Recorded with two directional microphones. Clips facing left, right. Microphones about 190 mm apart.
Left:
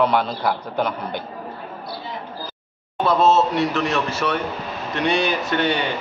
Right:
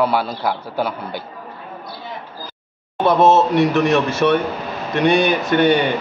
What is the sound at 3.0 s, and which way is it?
A man's voice, 20° right (ahead or behind).